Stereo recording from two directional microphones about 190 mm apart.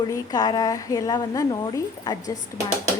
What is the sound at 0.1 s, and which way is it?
Speech, 20° left (ahead or behind).